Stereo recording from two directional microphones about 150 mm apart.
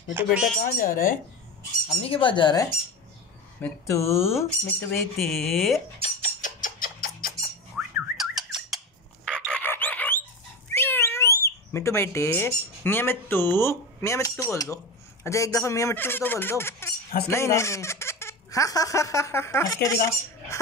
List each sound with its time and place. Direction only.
0.1 s speech: 10° right (ahead or behind)
0.6 s speech: 70° left (ahead or behind)
2.0 s speech: 35° left (ahead or behind)
3.6 s speech: 15° left (ahead or behind)
5.3 s speech: centre (ahead or behind)
5.9 s a sound: 45° left (ahead or behind); by 7.3 s 70° left (ahead or behind)
7.8 s a sound: 10° right (ahead or behind)
8.2 s chicken: centre (ahead or behind)
10.7 s a sound: 15° left (ahead or behind)
11.4 s speech: 20° left (ahead or behind)